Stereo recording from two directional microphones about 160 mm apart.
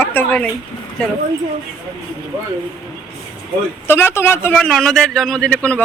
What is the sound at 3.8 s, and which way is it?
A man's voice, 15° left (ahead or behind).